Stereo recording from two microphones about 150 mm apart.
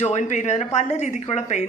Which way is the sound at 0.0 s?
50° left (ahead or behind).